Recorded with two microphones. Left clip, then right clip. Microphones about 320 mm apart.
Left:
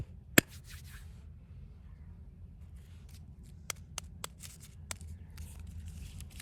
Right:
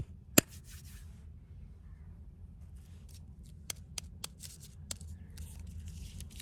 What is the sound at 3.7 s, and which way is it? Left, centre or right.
Shuffling cards, centre.